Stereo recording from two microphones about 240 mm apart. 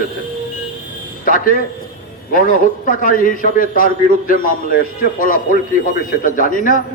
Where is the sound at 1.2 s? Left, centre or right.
Left.